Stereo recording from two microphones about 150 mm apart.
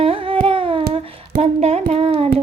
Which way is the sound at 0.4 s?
35° right (ahead or behind).